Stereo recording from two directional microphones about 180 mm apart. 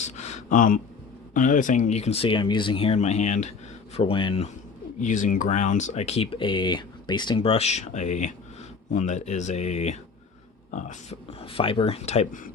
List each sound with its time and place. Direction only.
0.0 s a sound: 40° left (ahead or behind)
1.3 s speech: 45° left (ahead or behind)
4.9 s speech: 45° left (ahead or behind)